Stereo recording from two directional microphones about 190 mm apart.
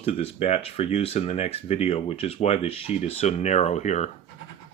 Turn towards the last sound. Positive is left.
turn(degrees=35)  # may be behind; listen again after turning